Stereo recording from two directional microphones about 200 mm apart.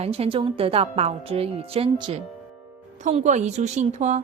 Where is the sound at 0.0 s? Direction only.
30° right (ahead or behind).